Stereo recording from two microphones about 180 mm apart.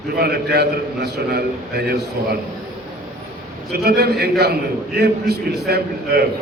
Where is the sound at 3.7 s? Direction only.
60° right (ahead or behind).